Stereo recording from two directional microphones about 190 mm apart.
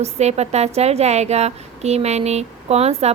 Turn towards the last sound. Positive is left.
turn(degrees=-35)  # may be behind; listen again after turning